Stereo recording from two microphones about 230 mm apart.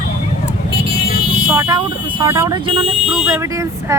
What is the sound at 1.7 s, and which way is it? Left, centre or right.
Speech, centre.